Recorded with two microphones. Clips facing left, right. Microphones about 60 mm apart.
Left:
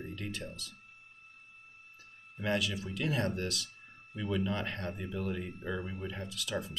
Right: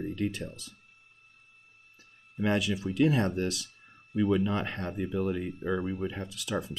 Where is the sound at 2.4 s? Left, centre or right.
Centre.